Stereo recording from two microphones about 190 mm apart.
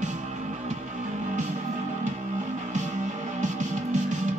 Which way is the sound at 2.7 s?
40° right (ahead or behind).